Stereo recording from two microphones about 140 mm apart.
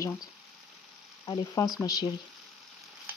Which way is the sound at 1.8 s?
25° left (ahead or behind).